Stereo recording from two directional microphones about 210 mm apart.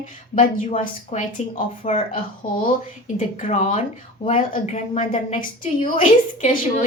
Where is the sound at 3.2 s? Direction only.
35° left (ahead or behind).